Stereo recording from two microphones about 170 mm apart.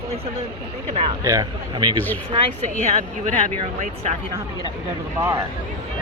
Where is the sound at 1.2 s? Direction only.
20° right (ahead or behind).